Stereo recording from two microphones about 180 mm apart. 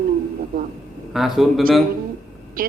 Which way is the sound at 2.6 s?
50° right (ahead or behind).